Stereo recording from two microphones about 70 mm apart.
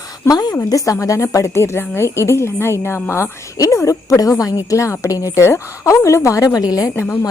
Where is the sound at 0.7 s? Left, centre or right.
Left.